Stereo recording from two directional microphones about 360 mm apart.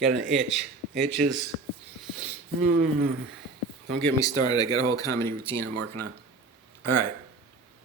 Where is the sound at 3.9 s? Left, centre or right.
Centre.